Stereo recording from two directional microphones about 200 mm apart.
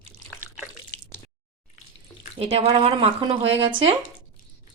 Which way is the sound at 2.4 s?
30° right (ahead or behind).